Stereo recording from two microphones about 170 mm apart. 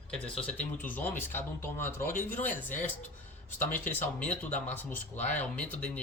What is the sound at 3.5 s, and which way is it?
Speech, 10° left (ahead or behind).